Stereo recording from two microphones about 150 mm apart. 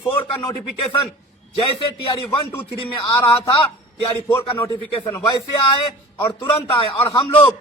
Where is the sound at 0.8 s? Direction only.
35° left (ahead or behind).